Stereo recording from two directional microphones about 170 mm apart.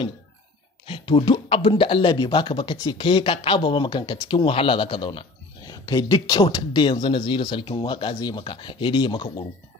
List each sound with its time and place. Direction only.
0.8 s speech: 30° left (ahead or behind)